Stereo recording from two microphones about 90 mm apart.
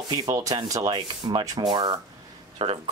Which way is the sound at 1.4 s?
45° right (ahead or behind).